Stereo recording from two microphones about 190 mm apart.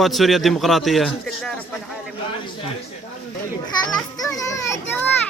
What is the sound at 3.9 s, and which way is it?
A child's voice, 15° left (ahead or behind).